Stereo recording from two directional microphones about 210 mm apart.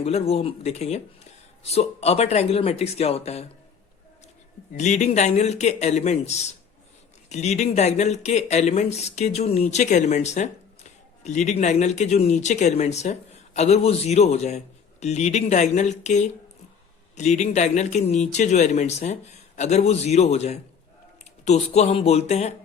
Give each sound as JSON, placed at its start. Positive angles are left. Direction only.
{"t": 0.0, "sound": "speech", "side_deg": 30}
{"t": 4.7, "sound": "speech", "side_deg": 35}